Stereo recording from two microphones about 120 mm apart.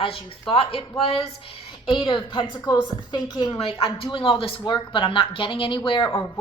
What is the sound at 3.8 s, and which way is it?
A woman's voice, 45° left (ahead or behind).